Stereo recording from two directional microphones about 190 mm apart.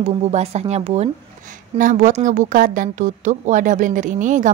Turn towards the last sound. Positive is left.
turn(degrees=-40)  # may be behind; listen again after turning